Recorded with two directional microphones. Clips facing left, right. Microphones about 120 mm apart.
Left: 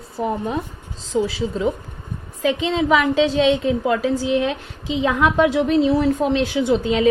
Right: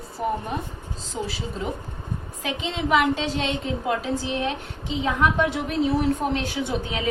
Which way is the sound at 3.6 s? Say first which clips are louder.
Left 7 dB; 90° left.